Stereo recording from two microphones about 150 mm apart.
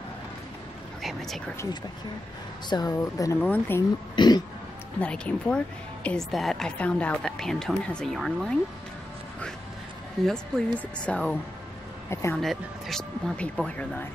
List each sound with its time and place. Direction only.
1.0 s a sound: centre (ahead or behind)
2.7 s speech: 25° left (ahead or behind)
4.1 s speech: 30° left (ahead or behind)
5.0 s a woman's voice: 5° left (ahead or behind)
10.2 s a woman's voice: centre (ahead or behind)
12.1 s speech: 15° left (ahead or behind)
12.4 s a woman's voice: centre (ahead or behind)